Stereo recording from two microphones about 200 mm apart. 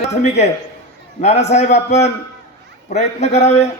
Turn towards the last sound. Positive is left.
turn(degrees=35)  # may be behind; listen again after turning